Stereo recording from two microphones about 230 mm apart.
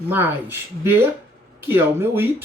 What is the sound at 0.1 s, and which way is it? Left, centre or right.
Speech, centre.